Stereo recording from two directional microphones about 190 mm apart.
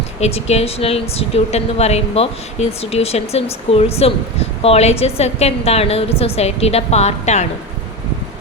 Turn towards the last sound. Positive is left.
turn(degrees=35)  # may be behind; listen again after turning